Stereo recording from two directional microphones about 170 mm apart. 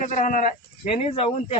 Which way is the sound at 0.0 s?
50° left (ahead or behind).